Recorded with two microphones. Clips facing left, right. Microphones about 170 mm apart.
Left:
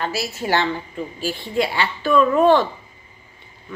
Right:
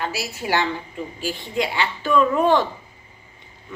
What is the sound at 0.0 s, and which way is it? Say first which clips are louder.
A woman's voice: left 3 dB; 15° right (ahead or behind).